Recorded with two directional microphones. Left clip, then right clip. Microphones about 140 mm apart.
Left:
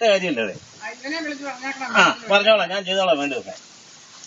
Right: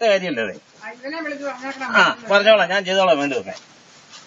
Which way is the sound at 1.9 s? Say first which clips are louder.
Right 1 dB; 10° right (ahead or behind).